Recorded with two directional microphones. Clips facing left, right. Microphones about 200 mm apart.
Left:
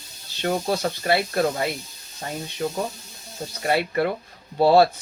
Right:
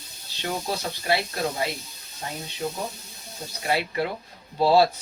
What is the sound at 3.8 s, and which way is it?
Speech, 55° left (ahead or behind).